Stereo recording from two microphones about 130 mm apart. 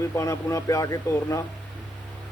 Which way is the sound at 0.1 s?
25° left (ahead or behind).